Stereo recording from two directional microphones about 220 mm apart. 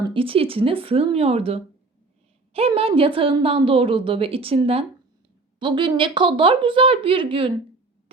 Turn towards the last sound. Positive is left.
turn(degrees=-25)  # may be behind; listen again after turning